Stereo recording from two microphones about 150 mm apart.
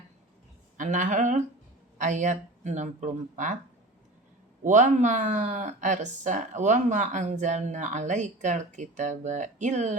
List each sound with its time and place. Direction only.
0.8 s speech: 55° right (ahead or behind)
4.6 s speech: 55° right (ahead or behind)